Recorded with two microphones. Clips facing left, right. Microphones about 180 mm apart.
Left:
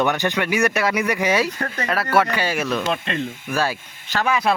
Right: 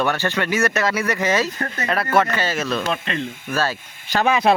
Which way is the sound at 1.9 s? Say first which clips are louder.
Even; 5° left (ahead or behind).